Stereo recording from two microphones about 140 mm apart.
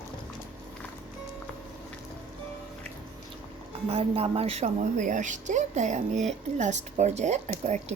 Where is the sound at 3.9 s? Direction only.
45° right (ahead or behind).